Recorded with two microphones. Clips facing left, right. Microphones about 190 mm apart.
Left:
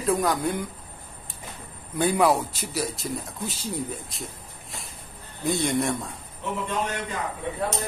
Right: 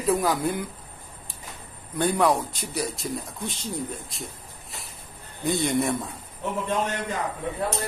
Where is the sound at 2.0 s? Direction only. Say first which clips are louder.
Left 1 dB; 5° left (ahead or behind).